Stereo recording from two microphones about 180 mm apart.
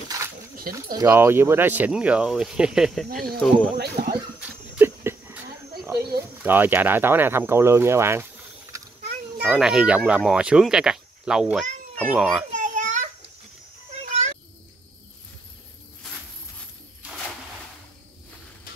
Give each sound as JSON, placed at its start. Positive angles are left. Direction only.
{"t": 0.6, "sound": "speech", "side_deg": -55}
{"t": 0.9, "sound": "speech", "side_deg": -15}
{"t": 3.7, "sound": "speech", "side_deg": -60}
{"t": 4.7, "sound": "a sound", "side_deg": -10}
{"t": 5.9, "sound": "speech", "side_deg": -60}
{"t": 6.4, "sound": "speech", "side_deg": -10}
{"t": 9.4, "sound": "speech", "side_deg": -5}
{"t": 12.5, "sound": "a sound", "side_deg": -45}